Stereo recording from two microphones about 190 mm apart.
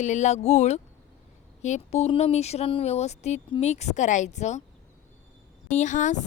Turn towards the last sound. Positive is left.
turn(degrees=40)  # may be behind; listen again after turning